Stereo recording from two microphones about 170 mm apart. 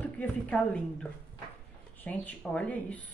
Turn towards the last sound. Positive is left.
turn(degrees=5)  # may be behind; listen again after turning